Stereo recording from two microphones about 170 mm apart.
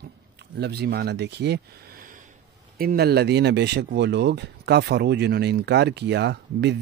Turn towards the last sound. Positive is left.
turn(degrees=-90)